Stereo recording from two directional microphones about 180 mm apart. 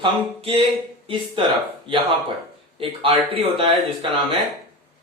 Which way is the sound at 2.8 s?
30° right (ahead or behind).